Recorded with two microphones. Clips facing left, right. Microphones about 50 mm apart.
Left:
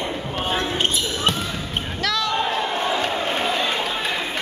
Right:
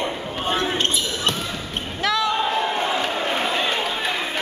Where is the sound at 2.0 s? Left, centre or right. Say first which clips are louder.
Right 3 dB; centre.